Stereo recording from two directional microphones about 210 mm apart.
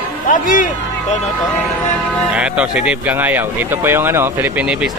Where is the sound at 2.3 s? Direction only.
5° right (ahead or behind).